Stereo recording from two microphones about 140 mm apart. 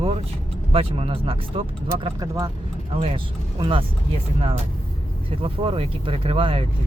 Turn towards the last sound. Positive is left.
turn(degrees=-40)  # may be behind; listen again after turning